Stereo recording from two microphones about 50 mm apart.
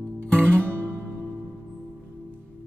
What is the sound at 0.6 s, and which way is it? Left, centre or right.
Music, right.